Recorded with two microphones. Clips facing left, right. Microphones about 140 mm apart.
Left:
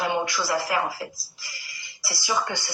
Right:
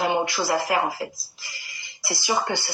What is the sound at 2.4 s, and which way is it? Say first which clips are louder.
Speech: right 4 dB; 35° right (ahead or behind).